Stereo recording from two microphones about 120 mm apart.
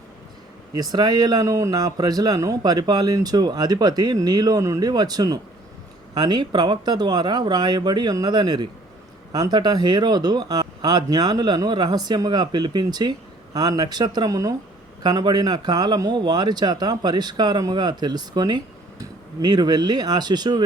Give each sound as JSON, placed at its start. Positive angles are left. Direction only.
{"t": 0.8, "sound": "speech", "side_deg": -35}